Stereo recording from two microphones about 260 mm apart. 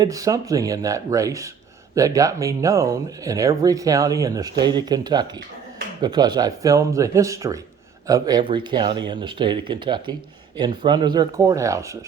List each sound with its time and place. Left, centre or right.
0.0 s speech: centre